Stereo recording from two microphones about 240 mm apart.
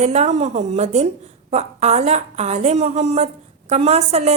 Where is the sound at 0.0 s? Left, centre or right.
Right.